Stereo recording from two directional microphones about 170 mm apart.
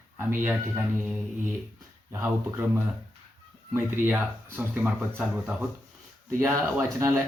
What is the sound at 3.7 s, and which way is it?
Speech, 10° right (ahead or behind).